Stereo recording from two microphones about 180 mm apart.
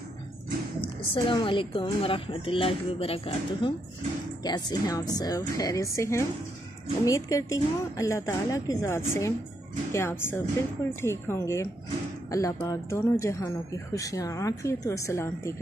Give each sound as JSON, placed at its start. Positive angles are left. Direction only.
{"t": 0.7, "sound": "a woman's voice", "side_deg": 25}
{"t": 4.4, "sound": "a woman's voice", "side_deg": 20}